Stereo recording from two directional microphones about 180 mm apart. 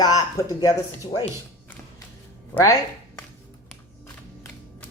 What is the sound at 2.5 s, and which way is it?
Speech, 10° left (ahead or behind).